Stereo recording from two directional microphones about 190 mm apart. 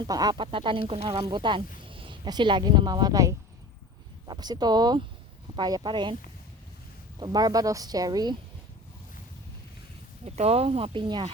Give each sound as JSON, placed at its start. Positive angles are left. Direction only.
{"t": 0.0, "sound": "speech", "side_deg": -20}
{"t": 7.2, "sound": "speech", "side_deg": -20}
{"t": 10.2, "sound": "speech", "side_deg": -35}